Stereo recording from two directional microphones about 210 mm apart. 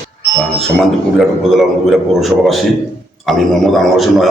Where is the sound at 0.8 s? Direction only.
Centre (ahead or behind).